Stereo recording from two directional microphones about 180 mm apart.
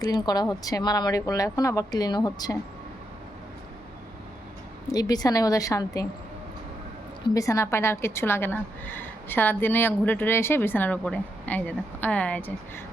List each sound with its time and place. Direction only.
0.0 s speech: 20° left (ahead or behind)
4.9 s speech: 20° left (ahead or behind)
7.3 s a woman's voice: 20° left (ahead or behind)